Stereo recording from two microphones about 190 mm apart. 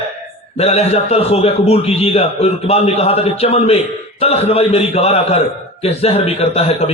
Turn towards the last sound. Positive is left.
turn(degrees=30)  # may be behind; listen again after turning